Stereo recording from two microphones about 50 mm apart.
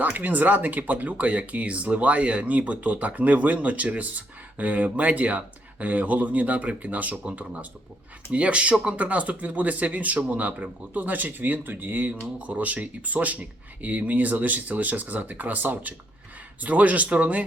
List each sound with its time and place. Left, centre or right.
0.0 s speech: right